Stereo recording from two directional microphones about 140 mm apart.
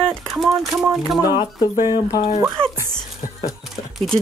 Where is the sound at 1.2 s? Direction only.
25° left (ahead or behind).